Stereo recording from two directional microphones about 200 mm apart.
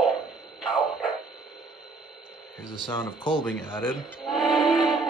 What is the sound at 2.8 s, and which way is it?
Speech, 25° left (ahead or behind).